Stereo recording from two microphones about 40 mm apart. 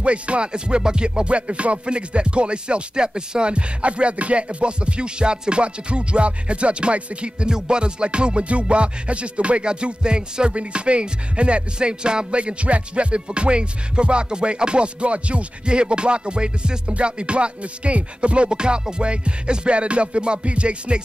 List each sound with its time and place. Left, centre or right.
0.0 s music: right